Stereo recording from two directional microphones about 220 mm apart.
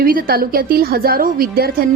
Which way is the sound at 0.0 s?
40° right (ahead or behind).